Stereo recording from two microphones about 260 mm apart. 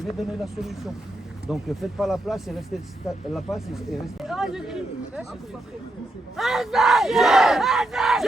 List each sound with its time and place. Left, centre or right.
0.0 s battle cry: centre
6.3 s battle cry: centre